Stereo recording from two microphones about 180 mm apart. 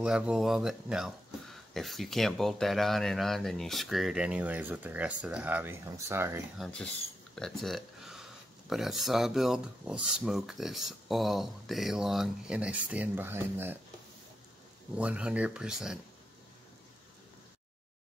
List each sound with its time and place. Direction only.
0.0 s speech: 5° right (ahead or behind)
6.6 s speech: 5° left (ahead or behind); by 13.7 s 10° right (ahead or behind)
15.0 s speech: 5° right (ahead or behind)